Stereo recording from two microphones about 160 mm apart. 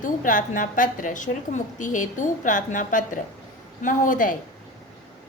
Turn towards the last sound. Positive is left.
turn(degrees=55)  # may be behind; listen again after turning